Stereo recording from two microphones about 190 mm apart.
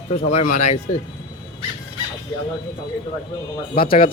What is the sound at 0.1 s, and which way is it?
Speech, 35° left (ahead or behind).